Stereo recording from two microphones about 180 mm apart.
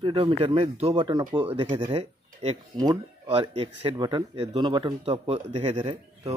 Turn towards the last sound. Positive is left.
turn(degrees=-35)  # may be behind; listen again after turning